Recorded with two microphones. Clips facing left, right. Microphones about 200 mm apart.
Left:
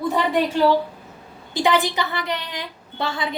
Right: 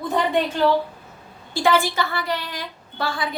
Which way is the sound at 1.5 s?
20° left (ahead or behind).